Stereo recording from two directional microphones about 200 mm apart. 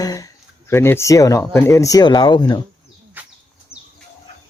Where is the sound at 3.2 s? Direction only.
10° right (ahead or behind).